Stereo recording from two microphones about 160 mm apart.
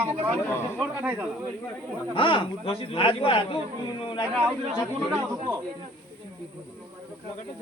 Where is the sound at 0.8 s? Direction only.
10° right (ahead or behind).